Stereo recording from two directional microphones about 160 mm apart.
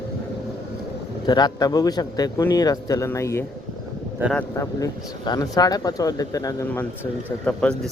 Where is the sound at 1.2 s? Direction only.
25° left (ahead or behind).